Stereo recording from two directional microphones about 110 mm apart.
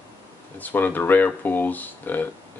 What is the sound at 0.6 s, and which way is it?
Speech, 15° left (ahead or behind).